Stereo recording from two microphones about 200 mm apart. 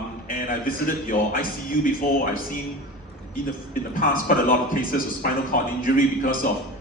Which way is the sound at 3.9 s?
45° left (ahead or behind).